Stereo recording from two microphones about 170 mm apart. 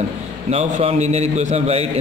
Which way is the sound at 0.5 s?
40° right (ahead or behind).